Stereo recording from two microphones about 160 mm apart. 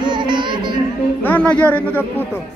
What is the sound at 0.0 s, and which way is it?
Music, 30° right (ahead or behind).